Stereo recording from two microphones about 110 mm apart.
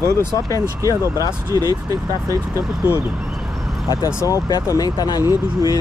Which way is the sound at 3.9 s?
30° left (ahead or behind).